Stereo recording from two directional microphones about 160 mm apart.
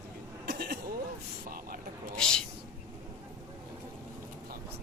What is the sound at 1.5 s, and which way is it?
Speech, 65° right (ahead or behind).